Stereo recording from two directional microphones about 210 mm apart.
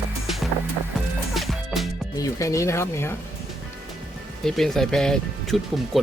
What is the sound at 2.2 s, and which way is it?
Speech, 15° left (ahead or behind).